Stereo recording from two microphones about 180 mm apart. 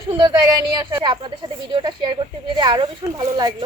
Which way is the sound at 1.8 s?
25° right (ahead or behind).